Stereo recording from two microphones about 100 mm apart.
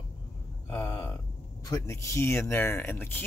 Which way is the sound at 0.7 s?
30° left (ahead or behind).